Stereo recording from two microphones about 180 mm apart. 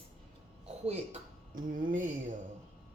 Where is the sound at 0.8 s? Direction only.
45° right (ahead or behind).